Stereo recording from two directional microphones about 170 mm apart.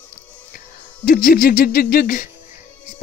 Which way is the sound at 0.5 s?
60° left (ahead or behind).